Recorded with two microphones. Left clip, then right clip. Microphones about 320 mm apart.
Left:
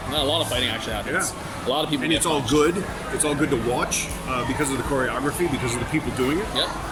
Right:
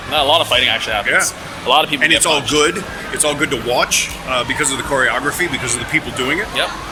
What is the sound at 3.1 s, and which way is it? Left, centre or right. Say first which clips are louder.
Speech: right 6 dB; centre.